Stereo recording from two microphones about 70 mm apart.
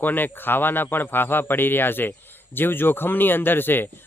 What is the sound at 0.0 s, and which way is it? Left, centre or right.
Speech, left.